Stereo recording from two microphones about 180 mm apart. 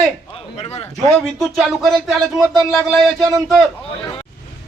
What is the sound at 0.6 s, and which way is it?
Speech, 35° left (ahead or behind).